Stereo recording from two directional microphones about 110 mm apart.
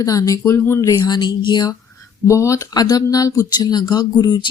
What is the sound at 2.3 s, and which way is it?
Speech, 25° left (ahead or behind).